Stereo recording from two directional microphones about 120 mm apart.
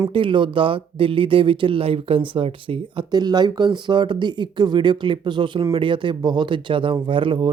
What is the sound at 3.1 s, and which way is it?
Speech, 35° right (ahead or behind).